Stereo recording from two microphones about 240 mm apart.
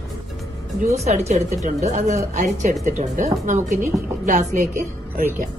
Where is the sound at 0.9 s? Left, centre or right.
Right.